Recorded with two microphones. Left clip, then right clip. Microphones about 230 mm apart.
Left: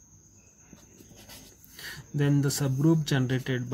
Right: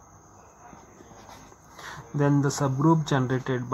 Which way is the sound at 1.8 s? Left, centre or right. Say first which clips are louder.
Right 4 dB; left.